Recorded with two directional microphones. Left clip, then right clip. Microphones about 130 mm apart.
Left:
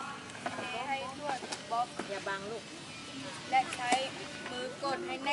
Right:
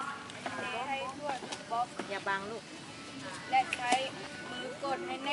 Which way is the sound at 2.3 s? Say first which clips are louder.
Right 5 dB; 25° right (ahead or behind).